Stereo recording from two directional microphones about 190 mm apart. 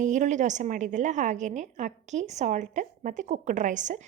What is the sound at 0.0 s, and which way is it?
A woman's voice, 40° right (ahead or behind).